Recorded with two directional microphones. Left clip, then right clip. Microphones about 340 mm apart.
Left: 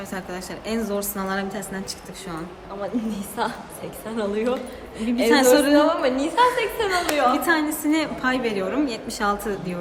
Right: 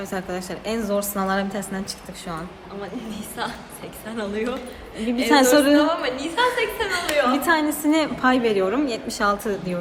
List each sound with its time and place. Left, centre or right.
0.1 s a woman's voice: centre
3.1 s a woman's voice: centre
5.0 s a woman's voice: centre
5.7 s a woman's voice: centre
7.3 s a woman's voice: centre